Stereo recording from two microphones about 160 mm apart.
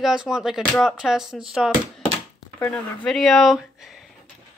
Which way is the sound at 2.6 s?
5° left (ahead or behind).